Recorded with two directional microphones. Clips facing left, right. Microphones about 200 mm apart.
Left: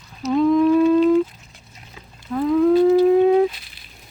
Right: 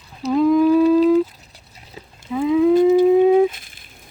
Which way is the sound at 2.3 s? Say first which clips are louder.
Right 1 dB; 5° right (ahead or behind).